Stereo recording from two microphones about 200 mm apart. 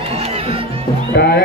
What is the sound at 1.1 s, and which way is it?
Music, 50° left (ahead or behind).